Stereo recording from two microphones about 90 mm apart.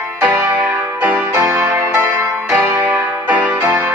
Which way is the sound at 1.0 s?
15° right (ahead or behind).